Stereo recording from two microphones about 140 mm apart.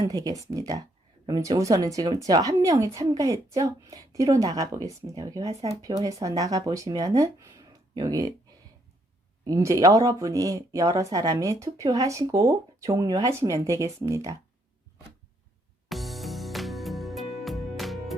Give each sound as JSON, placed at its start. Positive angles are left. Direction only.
{"t": 0.0, "sound": "speech", "side_deg": -25}
{"t": 9.4, "sound": "speech", "side_deg": -25}
{"t": 15.9, "sound": "music", "side_deg": 0}